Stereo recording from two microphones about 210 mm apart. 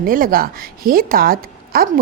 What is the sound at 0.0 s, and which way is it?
A woman's voice, 40° right (ahead or behind).